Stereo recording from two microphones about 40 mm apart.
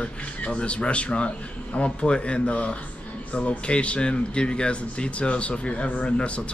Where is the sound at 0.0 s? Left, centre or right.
Left.